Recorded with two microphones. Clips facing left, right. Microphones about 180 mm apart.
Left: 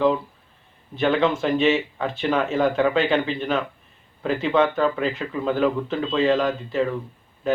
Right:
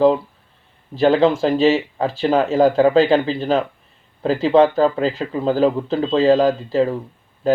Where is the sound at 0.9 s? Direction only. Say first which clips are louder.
Right 6 dB; 35° right (ahead or behind).